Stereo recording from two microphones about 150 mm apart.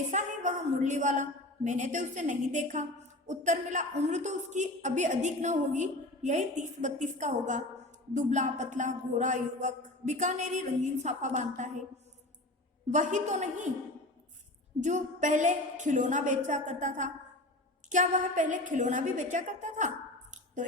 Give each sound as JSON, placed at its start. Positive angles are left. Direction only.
{"t": 0.1, "sound": "a woman's voice", "side_deg": -55}
{"t": 12.9, "sound": "a woman's voice", "side_deg": -55}
{"t": 14.8, "sound": "a woman's voice", "side_deg": -55}